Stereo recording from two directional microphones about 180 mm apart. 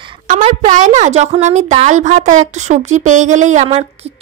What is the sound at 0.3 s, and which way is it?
A woman's voice, 40° right (ahead or behind).